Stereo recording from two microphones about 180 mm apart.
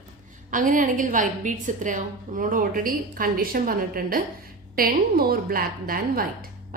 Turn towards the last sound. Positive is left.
turn(degrees=-55)  # may be behind; listen again after turning